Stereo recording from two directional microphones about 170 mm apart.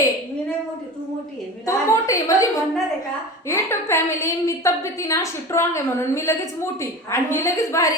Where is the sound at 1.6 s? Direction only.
20° left (ahead or behind).